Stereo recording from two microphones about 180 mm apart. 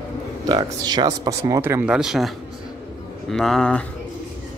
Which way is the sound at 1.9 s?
5° right (ahead or behind).